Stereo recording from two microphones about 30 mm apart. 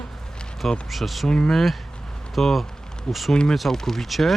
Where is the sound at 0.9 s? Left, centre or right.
Centre.